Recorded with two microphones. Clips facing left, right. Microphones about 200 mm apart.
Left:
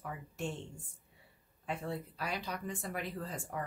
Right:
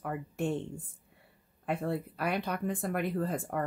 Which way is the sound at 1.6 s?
55° right (ahead or behind).